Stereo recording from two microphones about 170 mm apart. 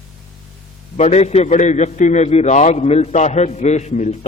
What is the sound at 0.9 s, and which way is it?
A man's voice, 40° left (ahead or behind).